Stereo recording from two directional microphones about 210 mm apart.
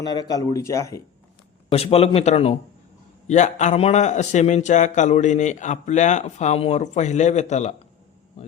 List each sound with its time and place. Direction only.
0.0 s speech: 20° left (ahead or behind)
1.7 s a man's voice: 30° left (ahead or behind)